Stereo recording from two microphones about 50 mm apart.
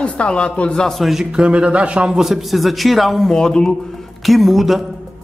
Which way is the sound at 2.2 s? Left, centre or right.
Centre.